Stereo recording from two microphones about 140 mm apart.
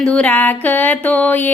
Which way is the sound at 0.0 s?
10° left (ahead or behind).